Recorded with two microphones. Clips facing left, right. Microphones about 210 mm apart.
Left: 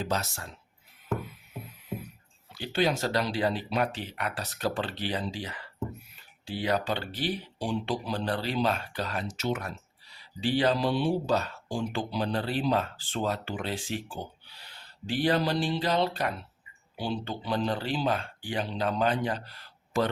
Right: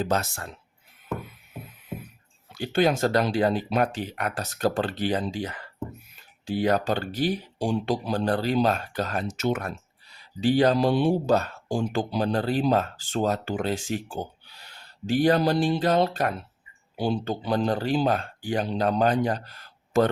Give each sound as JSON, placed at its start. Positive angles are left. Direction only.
{"t": 0.0, "sound": "speech", "side_deg": -55}
{"t": 2.5, "sound": "speech", "side_deg": -50}